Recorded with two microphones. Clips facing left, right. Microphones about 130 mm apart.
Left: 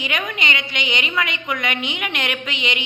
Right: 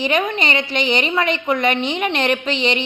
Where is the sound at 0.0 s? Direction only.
30° right (ahead or behind).